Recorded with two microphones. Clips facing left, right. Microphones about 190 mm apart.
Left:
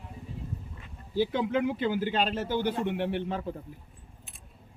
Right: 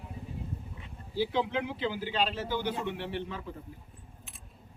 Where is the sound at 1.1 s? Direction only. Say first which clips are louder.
Left 3 dB; 50° left (ahead or behind).